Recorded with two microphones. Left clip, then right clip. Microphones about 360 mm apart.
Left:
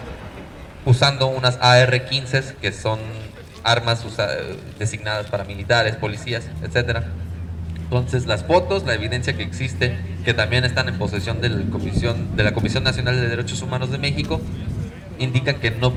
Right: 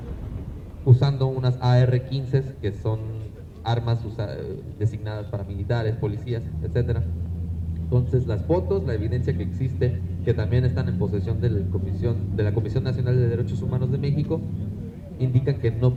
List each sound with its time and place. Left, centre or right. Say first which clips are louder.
0.9 s speech: left 7 dB; left